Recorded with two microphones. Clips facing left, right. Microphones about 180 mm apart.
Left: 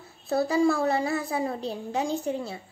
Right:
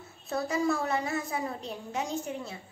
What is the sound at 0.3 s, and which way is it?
Child singing, 30° left (ahead or behind).